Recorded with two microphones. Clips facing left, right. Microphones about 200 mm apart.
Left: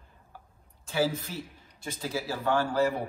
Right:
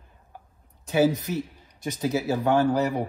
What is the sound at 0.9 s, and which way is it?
Speech, 20° right (ahead or behind).